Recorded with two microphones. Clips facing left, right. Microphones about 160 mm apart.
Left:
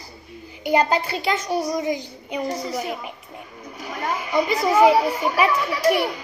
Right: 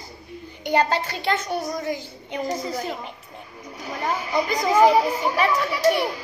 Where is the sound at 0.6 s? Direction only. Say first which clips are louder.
Left 2 dB; 10° left (ahead or behind).